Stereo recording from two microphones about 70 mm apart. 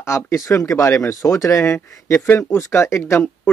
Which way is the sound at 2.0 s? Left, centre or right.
Left.